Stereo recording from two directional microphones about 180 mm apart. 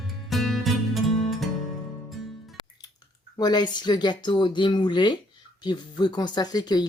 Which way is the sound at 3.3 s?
25° left (ahead or behind).